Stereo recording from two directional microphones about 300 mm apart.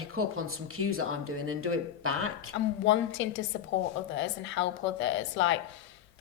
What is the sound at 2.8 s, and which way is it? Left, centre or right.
A woman's voice, left.